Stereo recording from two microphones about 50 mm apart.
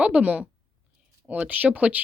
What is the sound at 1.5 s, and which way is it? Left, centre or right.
Speech, right.